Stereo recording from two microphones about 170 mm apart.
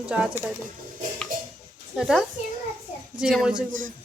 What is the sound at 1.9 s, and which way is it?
Speech, centre (ahead or behind).